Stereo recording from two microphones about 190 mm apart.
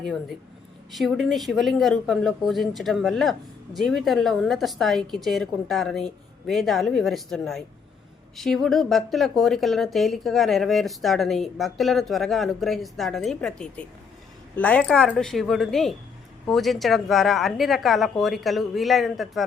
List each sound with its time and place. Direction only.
0.9 s speech: centre (ahead or behind)